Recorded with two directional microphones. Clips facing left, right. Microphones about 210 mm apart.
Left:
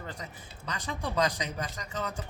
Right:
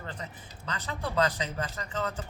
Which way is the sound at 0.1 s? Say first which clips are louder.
Right 1 dB; 10° left (ahead or behind).